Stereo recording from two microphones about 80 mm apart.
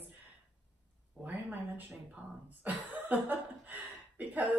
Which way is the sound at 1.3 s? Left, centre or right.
Right.